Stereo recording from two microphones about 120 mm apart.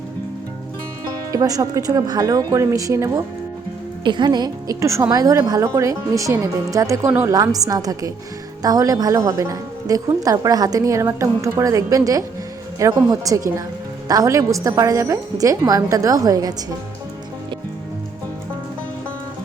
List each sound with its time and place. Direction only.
1.3 s a woman's voice: 30° right (ahead or behind)
4.0 s a woman's voice: 40° right (ahead or behind)